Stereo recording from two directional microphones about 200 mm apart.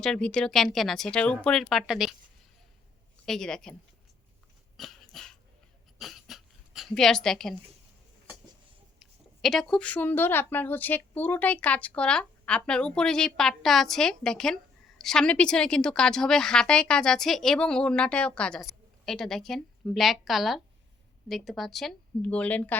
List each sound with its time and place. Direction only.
0.0 s a woman's voice: 5° left (ahead or behind)
3.2 s a woman's voice: 5° left (ahead or behind)
4.8 s dog: centre (ahead or behind)
6.0 s a sound: centre (ahead or behind)
9.0 s a woman's voice: centre (ahead or behind)